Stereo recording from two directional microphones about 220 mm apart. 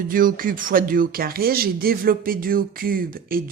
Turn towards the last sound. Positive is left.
turn(degrees=-40)  # may be behind; listen again after turning